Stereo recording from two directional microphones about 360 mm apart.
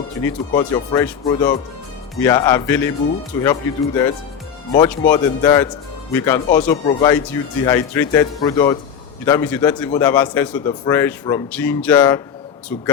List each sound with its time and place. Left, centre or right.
0.2 s a man's voice: centre